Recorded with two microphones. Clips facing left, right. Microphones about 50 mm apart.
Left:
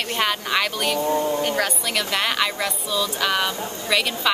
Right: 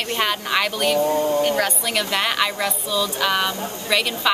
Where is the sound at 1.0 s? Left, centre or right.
Left.